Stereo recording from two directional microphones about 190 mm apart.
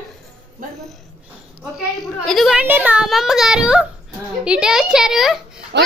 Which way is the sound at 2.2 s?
Centre (ahead or behind).